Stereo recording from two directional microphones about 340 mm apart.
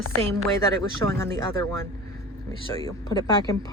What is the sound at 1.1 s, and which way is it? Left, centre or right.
Speech, centre.